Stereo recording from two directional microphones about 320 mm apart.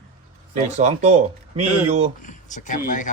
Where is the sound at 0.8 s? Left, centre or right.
Right.